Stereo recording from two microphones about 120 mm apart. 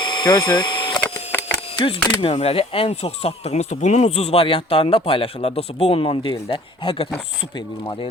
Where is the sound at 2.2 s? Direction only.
55° left (ahead or behind).